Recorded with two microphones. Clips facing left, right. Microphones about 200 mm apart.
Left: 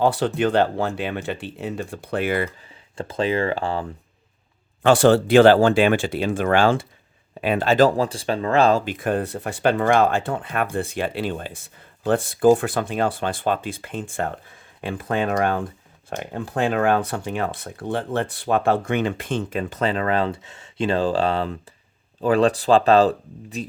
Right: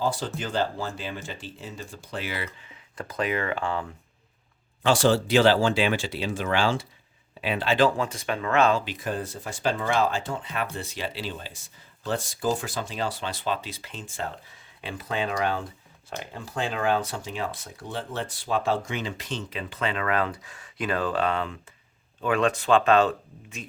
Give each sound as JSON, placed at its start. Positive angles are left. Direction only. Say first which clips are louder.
{"t": 0.0, "sound": "speech", "louder": "left 9 dB", "side_deg": 65}
{"t": 2.6, "sound": "speech", "louder": "left 6 dB", "side_deg": 30}
{"t": 4.8, "sound": "speech", "louder": "left 6 dB", "side_deg": 55}
{"t": 8.8, "sound": "speech", "louder": "left 7 dB", "side_deg": 55}